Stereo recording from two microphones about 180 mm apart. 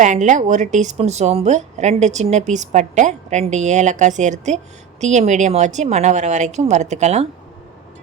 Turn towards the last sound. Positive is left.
turn(degrees=-40)  # may be behind; listen again after turning